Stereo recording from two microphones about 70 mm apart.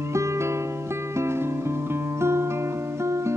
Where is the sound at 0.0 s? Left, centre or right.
Right.